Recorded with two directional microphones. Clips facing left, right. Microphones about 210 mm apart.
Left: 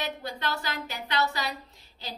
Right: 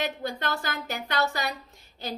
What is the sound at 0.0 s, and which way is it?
A woman's voice, 50° right (ahead or behind).